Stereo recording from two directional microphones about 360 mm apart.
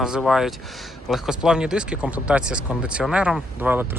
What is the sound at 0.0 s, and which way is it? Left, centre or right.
Speech, centre.